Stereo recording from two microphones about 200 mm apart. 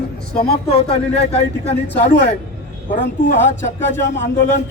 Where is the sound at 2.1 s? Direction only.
60° left (ahead or behind).